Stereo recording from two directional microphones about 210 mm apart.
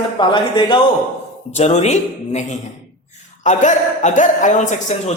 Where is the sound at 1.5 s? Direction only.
35° left (ahead or behind).